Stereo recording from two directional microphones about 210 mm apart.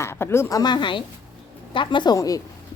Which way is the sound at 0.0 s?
10° left (ahead or behind).